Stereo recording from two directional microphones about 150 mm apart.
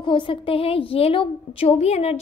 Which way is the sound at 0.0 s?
35° left (ahead or behind).